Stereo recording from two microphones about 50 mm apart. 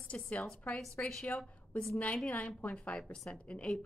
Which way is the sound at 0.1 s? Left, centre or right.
Left.